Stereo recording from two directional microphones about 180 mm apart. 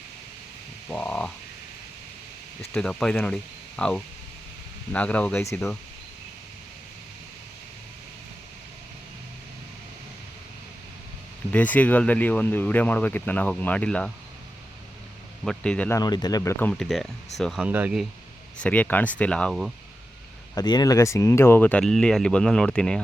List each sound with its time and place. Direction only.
0.9 s speech: 5° left (ahead or behind)
2.7 s speech: 5° left (ahead or behind)
11.5 s speech: 10° left (ahead or behind)
15.4 s speech: 5° left (ahead or behind)
16.0 s speech: 20° left (ahead or behind); by 18.0 s 10° right (ahead or behind)
18.6 s speech: 10° left (ahead or behind)
20.6 s speech: 20° left (ahead or behind); by 23.0 s 5° left (ahead or behind)